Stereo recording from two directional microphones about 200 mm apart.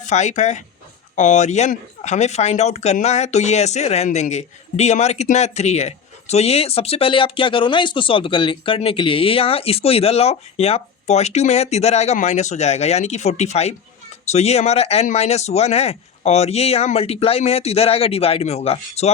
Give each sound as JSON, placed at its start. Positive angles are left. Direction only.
{"t": 0.0, "sound": "speech", "side_deg": 35}